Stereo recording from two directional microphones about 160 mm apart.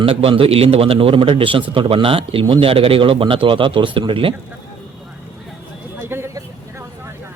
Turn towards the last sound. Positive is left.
turn(degrees=-15)  # may be behind; listen again after turning